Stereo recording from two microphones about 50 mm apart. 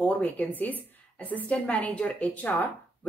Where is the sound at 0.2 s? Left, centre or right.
Left.